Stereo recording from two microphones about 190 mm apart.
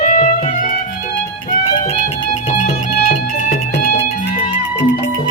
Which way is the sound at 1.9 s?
25° left (ahead or behind).